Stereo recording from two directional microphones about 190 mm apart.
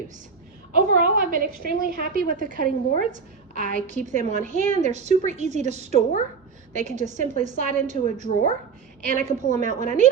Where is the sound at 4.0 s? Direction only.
40° right (ahead or behind).